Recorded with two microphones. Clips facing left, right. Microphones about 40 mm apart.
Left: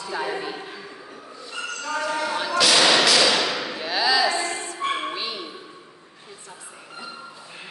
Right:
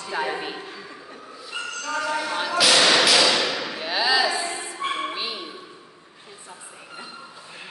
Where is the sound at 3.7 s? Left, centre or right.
Centre.